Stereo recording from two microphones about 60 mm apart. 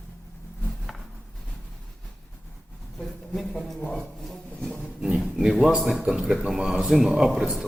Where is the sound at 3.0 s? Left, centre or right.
Centre.